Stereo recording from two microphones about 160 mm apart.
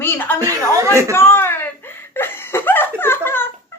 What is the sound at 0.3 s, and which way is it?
Chuckle, 20° right (ahead or behind).